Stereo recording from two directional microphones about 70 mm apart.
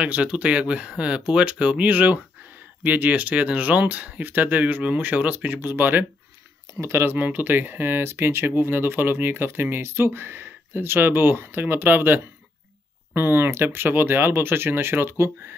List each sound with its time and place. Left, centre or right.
0.0 s speech: centre
6.7 s speech: right